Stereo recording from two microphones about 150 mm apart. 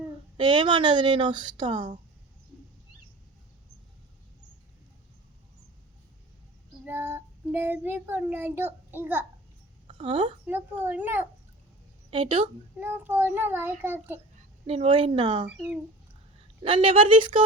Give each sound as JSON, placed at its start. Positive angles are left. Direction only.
{"t": 0.3, "sound": "speech", "side_deg": -35}
{"t": 6.8, "sound": "a child's voice", "side_deg": -15}
{"t": 10.0, "sound": "speech", "side_deg": -35}
{"t": 10.4, "sound": "a child's voice", "side_deg": -15}
{"t": 12.1, "sound": "speech", "side_deg": -35}
{"t": 12.8, "sound": "a child's voice", "side_deg": -15}
{"t": 14.7, "sound": "speech", "side_deg": -40}
{"t": 16.6, "sound": "speech", "side_deg": -35}